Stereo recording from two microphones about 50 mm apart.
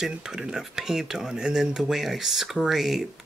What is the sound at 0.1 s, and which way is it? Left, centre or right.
Speech, centre.